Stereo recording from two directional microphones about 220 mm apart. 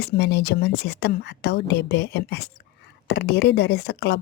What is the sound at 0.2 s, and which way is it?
A woman's voice, 45° left (ahead or behind).